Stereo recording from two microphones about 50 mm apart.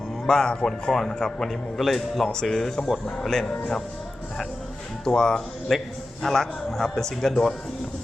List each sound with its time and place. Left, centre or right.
0.3 s a man's voice: centre
3.5 s a man's voice: left
5.0 s a man's voice: centre